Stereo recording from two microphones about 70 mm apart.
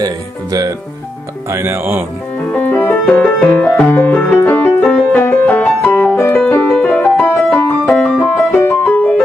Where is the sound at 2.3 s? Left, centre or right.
Centre.